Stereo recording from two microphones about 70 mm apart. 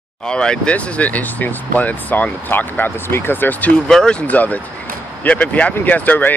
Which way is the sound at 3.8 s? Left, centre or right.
Centre.